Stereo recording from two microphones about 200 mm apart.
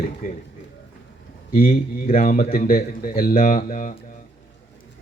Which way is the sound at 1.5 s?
45° left (ahead or behind).